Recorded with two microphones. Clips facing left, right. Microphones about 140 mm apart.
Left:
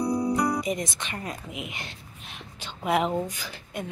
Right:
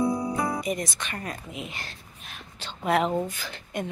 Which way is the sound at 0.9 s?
20° left (ahead or behind).